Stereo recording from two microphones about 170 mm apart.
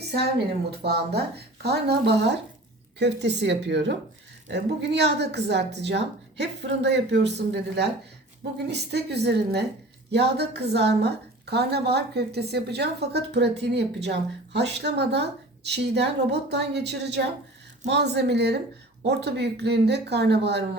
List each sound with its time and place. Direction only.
0.1 s a woman's voice: 70° right (ahead or behind)
3.0 s a woman's voice: 90° right